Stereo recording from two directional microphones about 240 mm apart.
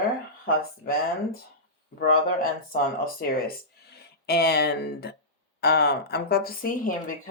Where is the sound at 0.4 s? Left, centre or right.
Left.